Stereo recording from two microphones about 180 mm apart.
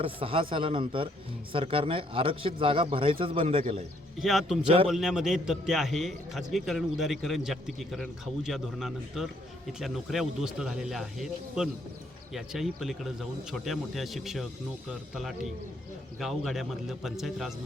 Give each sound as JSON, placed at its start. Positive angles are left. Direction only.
{"t": 0.0, "sound": "speech", "side_deg": -30}
{"t": 4.2, "sound": "a man's voice", "side_deg": 0}
{"t": 4.6, "sound": "a man's voice", "side_deg": -30}
{"t": 4.9, "sound": "a man's voice", "side_deg": 0}